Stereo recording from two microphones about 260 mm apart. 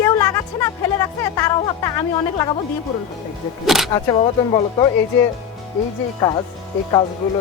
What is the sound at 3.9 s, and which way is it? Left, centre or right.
Speech, centre.